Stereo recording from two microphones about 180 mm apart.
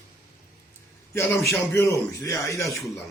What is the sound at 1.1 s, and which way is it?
A man's voice, 15° left (ahead or behind).